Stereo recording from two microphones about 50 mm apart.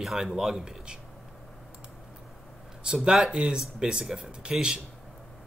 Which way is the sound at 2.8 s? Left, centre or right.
Centre.